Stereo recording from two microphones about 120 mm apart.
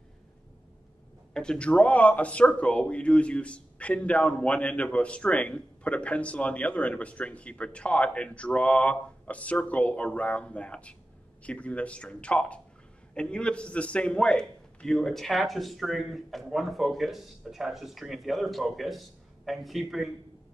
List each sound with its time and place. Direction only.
1.3 s a man's voice: 5° left (ahead or behind)